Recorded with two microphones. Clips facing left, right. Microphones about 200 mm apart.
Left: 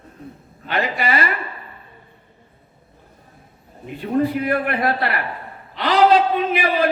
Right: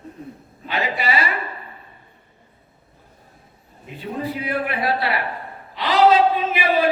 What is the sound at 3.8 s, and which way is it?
A man's voice, 50° left (ahead or behind).